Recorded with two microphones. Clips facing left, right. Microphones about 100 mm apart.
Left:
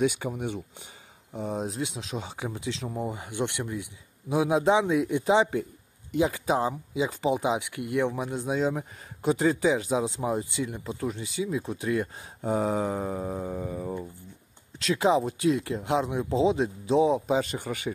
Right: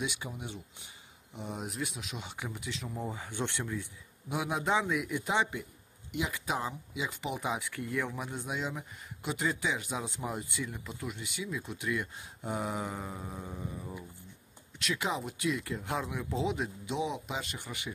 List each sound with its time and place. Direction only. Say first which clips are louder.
0.0 s speech: left 11 dB; 50° left (ahead or behind)
1.3 s speech: left 9 dB; 45° left (ahead or behind)
1.6 s speech: left 6 dB; 30° left (ahead or behind)
3.0 s speech: left 5 dB; 15° left (ahead or behind)
4.3 s a man's voice: left 9 dB; 30° left (ahead or behind); by 14.0 s 60° left (ahead or behind)
14.8 s speech: left 11 dB; 30° left (ahead or behind)